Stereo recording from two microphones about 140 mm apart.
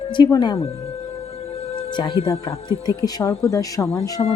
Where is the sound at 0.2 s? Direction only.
30° left (ahead or behind).